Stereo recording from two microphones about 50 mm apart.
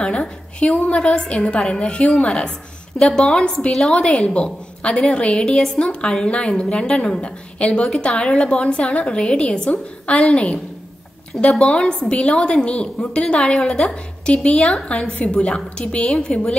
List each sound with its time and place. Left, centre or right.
0.0 s a woman's voice: left